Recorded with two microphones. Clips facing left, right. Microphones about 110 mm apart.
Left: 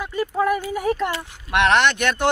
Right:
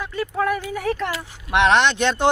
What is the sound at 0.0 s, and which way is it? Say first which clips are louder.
Speech: left 2 dB; 10° left (ahead or behind).